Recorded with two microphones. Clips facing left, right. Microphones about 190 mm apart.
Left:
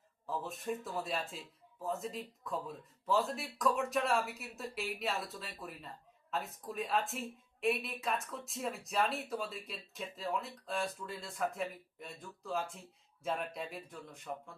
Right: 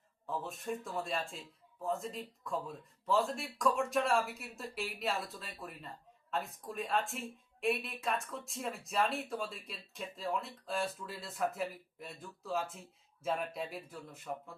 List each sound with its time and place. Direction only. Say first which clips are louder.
0.3 s speech: even; centre (ahead or behind)